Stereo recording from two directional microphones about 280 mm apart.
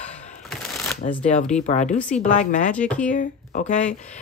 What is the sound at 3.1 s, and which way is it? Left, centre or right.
Speech, left.